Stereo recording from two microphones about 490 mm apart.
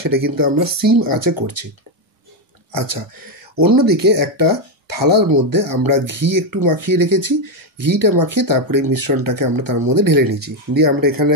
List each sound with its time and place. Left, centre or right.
0.0 s speech: right
2.7 s speech: right